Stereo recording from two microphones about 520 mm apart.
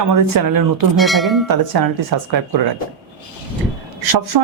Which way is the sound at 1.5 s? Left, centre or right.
Right.